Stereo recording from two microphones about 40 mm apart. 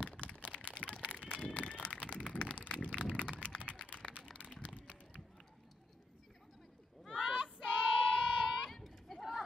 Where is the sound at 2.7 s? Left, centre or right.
Left.